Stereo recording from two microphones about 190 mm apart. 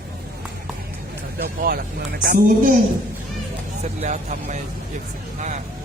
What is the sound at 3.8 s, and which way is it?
Speech, 40° right (ahead or behind).